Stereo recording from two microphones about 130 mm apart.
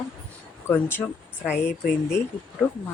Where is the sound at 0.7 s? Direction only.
15° left (ahead or behind).